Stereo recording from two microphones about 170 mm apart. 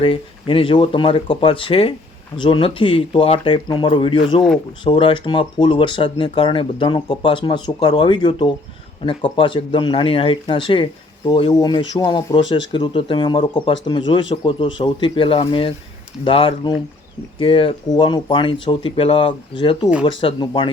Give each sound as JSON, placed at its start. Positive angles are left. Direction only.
{"t": 0.0, "sound": "speech", "side_deg": 30}